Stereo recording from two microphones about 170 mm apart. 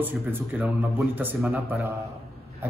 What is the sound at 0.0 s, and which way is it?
Speech, 10° right (ahead or behind).